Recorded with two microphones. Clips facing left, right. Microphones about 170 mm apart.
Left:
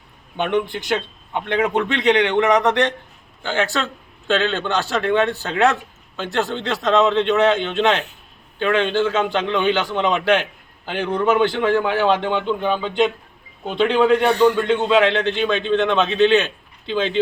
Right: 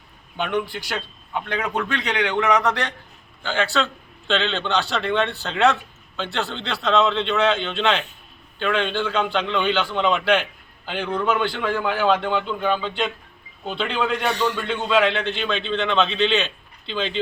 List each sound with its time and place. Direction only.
0.8 s a man's voice: 20° left (ahead or behind)